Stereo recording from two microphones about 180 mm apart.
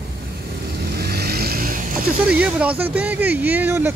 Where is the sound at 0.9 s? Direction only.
60° right (ahead or behind).